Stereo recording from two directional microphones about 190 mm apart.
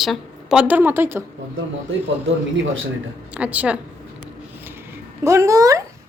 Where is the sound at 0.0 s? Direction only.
Centre (ahead or behind).